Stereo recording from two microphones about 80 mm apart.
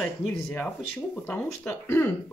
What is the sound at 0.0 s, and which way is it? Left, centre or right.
Speech, centre.